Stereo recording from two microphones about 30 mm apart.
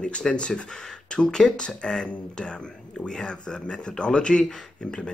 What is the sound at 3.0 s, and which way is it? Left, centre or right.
Speech, left.